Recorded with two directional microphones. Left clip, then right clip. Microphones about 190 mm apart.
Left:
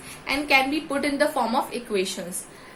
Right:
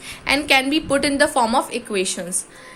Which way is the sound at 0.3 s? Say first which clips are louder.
Right 4 dB; 45° right (ahead or behind).